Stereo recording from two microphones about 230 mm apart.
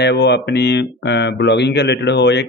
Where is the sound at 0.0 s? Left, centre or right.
Left.